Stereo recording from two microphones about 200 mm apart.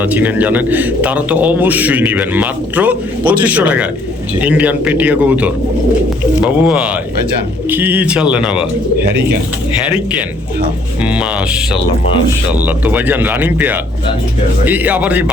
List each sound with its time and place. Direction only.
0.0 s a man's voice: 10° right (ahead or behind)
9.0 s speech: 55° right (ahead or behind)
9.8 s a man's voice: 5° right (ahead or behind)
12.5 s a man's voice: 10° right (ahead or behind)